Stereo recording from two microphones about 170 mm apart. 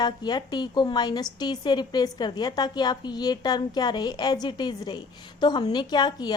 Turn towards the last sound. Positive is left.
turn(degrees=25)  # may be behind; listen again after turning